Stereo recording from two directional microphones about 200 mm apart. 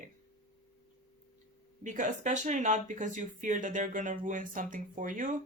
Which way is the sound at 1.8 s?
40° right (ahead or behind).